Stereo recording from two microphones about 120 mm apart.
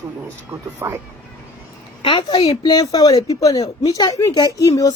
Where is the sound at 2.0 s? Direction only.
40° left (ahead or behind).